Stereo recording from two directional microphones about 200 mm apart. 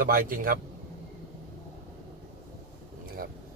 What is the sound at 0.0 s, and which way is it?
Speech, 45° right (ahead or behind).